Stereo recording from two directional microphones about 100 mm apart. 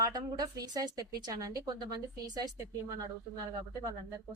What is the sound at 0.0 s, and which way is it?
A woman's voice, 40° right (ahead or behind).